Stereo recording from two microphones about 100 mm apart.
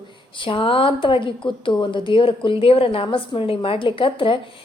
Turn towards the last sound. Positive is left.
turn(degrees=60)  # may be behind; listen again after turning